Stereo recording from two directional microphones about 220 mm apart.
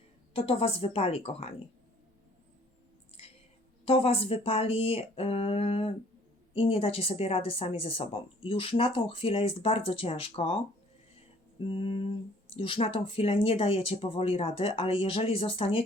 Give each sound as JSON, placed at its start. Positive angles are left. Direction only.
{"t": 0.3, "sound": "speech", "side_deg": 25}
{"t": 3.8, "sound": "speech", "side_deg": 25}
{"t": 11.6, "sound": "speech", "side_deg": 25}